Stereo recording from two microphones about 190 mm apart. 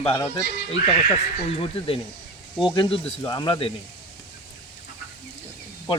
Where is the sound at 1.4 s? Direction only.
30° left (ahead or behind).